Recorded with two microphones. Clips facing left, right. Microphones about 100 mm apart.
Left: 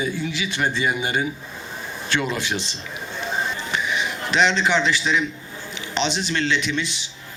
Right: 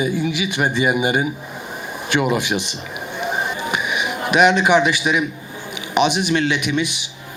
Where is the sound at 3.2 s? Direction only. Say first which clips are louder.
Right 4 dB; 15° right (ahead or behind).